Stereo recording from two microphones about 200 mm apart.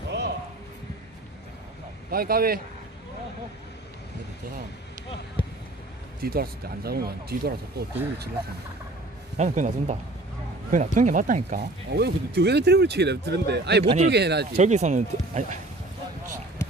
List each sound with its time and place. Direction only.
0.1 s a sound: 60° right (ahead or behind)
2.0 s speech: 50° right (ahead or behind)
6.2 s speech: 50° right (ahead or behind)
9.4 s speech: 35° right (ahead or behind)
11.9 s speech: 55° right (ahead or behind)
13.8 s speech: 30° right (ahead or behind)
14.1 s speech: 55° right (ahead or behind)
14.6 s speech: 35° right (ahead or behind)
16.6 s a sound: 15° left (ahead or behind)